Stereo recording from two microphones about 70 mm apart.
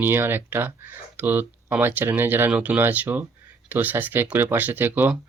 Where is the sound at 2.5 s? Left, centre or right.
Centre.